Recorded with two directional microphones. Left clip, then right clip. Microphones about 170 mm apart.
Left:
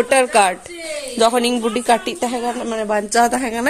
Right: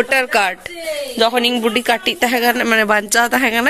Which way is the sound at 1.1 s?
10° left (ahead or behind).